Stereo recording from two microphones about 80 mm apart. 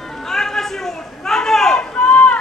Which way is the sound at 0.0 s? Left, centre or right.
Centre.